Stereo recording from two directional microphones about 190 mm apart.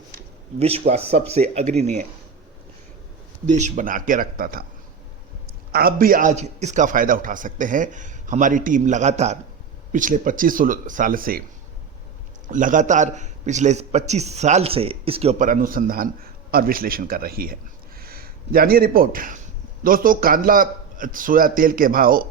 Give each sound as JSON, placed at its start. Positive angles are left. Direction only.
{"t": 0.6, "sound": "a man's voice", "side_deg": -30}
{"t": 3.5, "sound": "a man's voice", "side_deg": -40}
{"t": 5.7, "sound": "a man's voice", "side_deg": -50}
{"t": 12.5, "sound": "a man's voice", "side_deg": -45}